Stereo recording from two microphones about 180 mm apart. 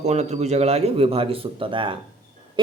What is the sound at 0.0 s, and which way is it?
A man's voice, 35° right (ahead or behind).